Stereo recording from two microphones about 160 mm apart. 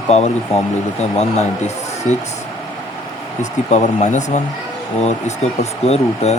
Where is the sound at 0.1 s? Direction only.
45° left (ahead or behind).